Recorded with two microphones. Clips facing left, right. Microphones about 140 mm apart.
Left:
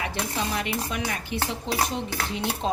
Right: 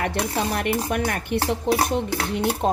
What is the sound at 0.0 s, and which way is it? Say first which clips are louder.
A woman's voice: right 5 dB; 55° right (ahead or behind).